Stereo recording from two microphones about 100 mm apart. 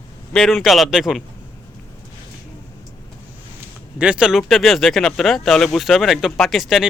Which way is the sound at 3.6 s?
10° right (ahead or behind).